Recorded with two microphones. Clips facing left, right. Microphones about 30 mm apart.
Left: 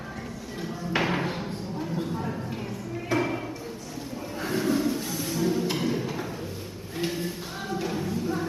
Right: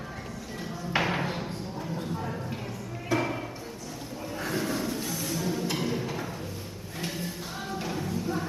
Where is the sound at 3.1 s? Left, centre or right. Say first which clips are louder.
Left 2 dB; centre.